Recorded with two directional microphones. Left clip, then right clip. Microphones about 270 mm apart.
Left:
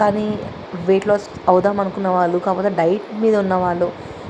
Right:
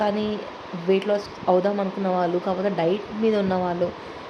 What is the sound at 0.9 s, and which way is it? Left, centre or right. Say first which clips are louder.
Speech: left 6 dB; centre.